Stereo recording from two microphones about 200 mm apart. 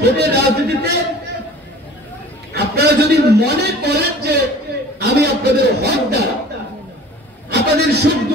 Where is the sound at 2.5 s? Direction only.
55° right (ahead or behind).